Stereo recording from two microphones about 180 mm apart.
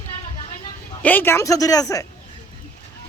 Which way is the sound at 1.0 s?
10° left (ahead or behind).